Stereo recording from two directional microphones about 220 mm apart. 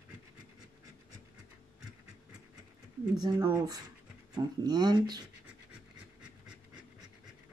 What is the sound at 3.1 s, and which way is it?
Speech, 15° right (ahead or behind).